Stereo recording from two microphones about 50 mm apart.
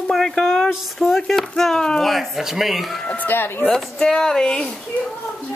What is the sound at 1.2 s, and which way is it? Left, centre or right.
Speech, centre.